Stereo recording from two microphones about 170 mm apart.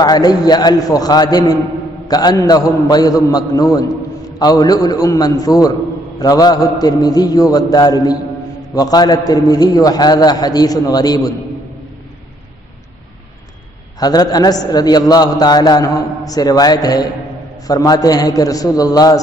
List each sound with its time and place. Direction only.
0.0 s a man's voice: 25° left (ahead or behind)
13.9 s a man's voice: 20° left (ahead or behind)